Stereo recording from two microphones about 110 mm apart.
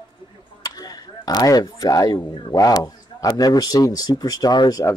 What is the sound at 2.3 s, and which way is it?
Speech, 50° left (ahead or behind).